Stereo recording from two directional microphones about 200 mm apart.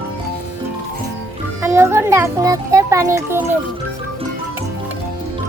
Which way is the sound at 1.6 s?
10° right (ahead or behind).